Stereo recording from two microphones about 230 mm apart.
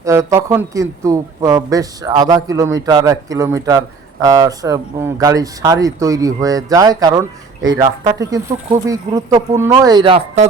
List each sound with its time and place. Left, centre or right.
0.0 s speech: centre